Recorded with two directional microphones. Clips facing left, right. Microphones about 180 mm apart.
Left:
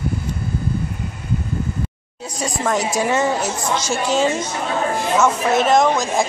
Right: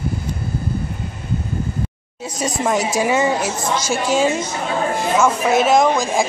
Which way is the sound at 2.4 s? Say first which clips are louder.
Right 1 dB; 15° right (ahead or behind).